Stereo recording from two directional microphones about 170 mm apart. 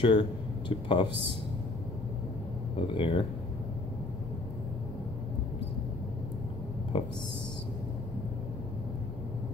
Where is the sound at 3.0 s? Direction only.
30° left (ahead or behind).